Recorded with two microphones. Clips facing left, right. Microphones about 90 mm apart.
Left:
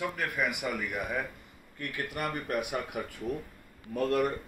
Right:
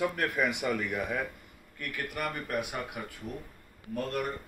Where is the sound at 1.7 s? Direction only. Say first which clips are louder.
Left 1 dB; 35° left (ahead or behind).